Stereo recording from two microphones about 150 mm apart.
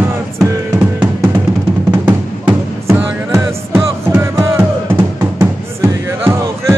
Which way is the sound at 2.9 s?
15° right (ahead or behind).